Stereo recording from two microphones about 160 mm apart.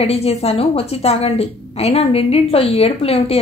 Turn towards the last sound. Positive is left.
turn(degrees=40)  # may be behind; listen again after turning